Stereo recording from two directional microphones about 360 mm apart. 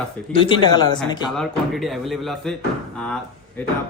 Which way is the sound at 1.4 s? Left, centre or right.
Centre.